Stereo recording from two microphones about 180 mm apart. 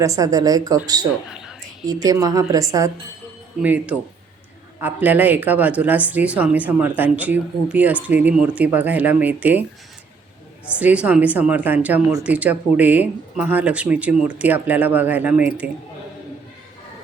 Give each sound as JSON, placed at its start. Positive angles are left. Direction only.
{"t": 0.0, "sound": "a woman's voice", "side_deg": -20}
{"t": 1.9, "sound": "a woman's voice", "side_deg": -20}
{"t": 3.6, "sound": "speech", "side_deg": -10}
{"t": 10.7, "sound": "speech", "side_deg": -10}